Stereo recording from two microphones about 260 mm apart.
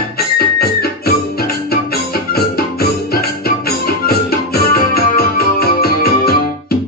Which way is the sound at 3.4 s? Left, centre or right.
Left.